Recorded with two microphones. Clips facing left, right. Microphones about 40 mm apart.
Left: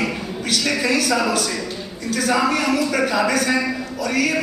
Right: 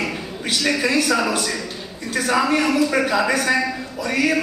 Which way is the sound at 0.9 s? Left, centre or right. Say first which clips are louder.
Left 1 dB; right.